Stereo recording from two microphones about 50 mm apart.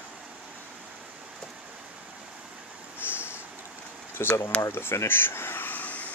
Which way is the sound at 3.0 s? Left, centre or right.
Left.